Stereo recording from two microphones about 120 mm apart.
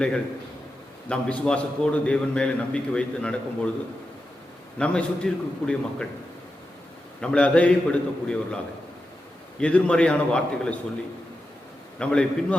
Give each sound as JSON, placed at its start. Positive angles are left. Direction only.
{"t": 1.0, "sound": "a man's voice", "side_deg": 10}
{"t": 4.8, "sound": "a man's voice", "side_deg": 10}
{"t": 7.2, "sound": "a man's voice", "side_deg": 10}
{"t": 9.6, "sound": "a man's voice", "side_deg": 10}
{"t": 11.9, "sound": "a man's voice", "side_deg": 10}